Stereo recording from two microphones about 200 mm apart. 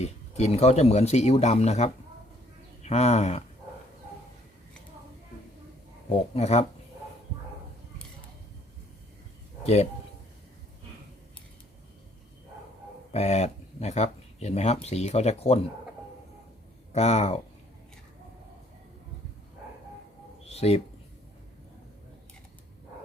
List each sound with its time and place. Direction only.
0.0 s speech: 30° left (ahead or behind)
6.3 s speech: 30° left (ahead or behind)
13.1 s speech: 35° left (ahead or behind)
16.9 s speech: 35° left (ahead or behind)
20.4 s a sound: 30° left (ahead or behind)